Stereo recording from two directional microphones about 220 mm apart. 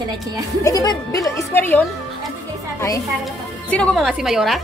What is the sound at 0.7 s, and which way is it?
Speech, 15° left (ahead or behind).